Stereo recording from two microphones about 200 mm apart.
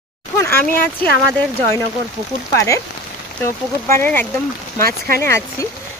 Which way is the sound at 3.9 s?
10° left (ahead or behind).